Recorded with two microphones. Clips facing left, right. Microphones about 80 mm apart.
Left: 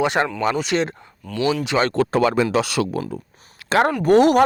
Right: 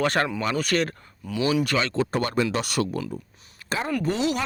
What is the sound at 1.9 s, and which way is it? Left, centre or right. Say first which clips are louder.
Speech: left 7 dB; left.